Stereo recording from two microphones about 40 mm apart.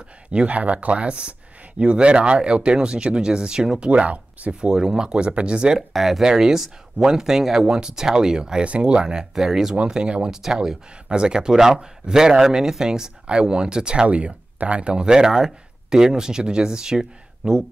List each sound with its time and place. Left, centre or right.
0.3 s speech: right
3.9 s speech: right
4.6 s speech: centre
5.8 s speech: centre
8.6 s speech: right; by 9.8 s centre
9.8 s speech: right
14.0 s speech: right; by 17.6 s centre